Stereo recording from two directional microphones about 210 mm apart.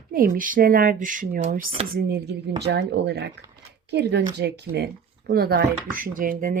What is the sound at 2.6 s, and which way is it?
Speech, 55° right (ahead or behind).